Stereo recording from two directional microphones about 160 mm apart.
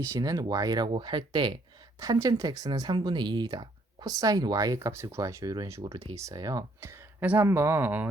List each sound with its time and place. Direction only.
0.0 s speech: 20° right (ahead or behind)